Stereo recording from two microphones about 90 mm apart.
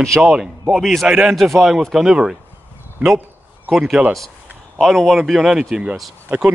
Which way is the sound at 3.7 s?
5° right (ahead or behind).